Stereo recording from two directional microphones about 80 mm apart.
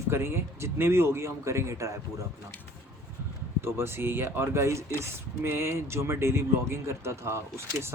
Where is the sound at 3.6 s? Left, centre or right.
Right.